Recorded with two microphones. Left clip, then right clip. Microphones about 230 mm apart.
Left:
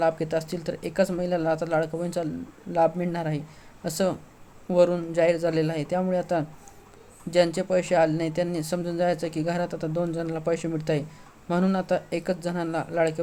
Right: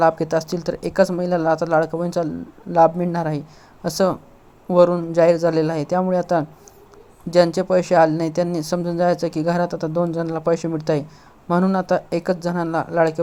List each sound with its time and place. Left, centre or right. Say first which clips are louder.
0.0 s speech: right 7 dB; centre